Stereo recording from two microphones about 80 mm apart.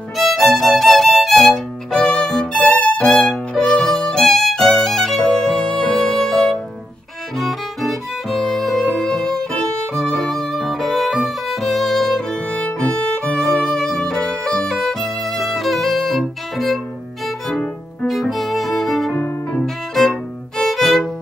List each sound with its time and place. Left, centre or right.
0.2 s violin: centre
7.3 s music: centre
12.4 s music: centre
13.2 s violin: centre
18.0 s music: centre
19.1 s music: left
19.6 s violin: centre